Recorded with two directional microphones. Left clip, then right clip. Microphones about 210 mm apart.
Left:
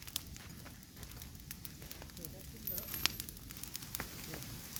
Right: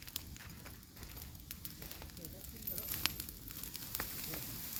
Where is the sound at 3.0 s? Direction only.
20° left (ahead or behind).